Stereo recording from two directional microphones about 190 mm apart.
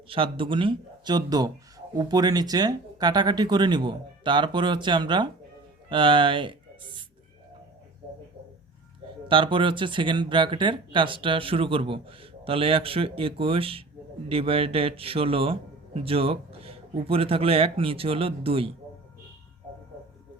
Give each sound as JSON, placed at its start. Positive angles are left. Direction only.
{"t": 0.1, "sound": "speech", "side_deg": -30}
{"t": 9.3, "sound": "speech", "side_deg": -25}